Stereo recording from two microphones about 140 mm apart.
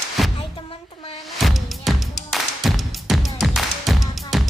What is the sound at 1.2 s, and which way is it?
Music, centre (ahead or behind).